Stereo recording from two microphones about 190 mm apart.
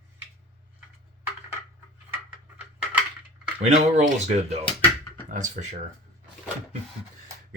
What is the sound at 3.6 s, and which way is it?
Speech, 35° right (ahead or behind).